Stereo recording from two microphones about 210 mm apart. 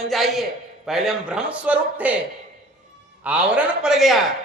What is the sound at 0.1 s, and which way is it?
A man's voice, centre (ahead or behind).